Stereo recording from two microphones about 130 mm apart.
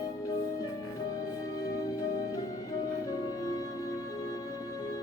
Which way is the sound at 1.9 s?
30° left (ahead or behind).